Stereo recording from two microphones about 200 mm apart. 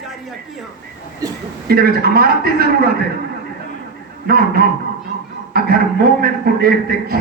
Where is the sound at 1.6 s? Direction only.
50° right (ahead or behind).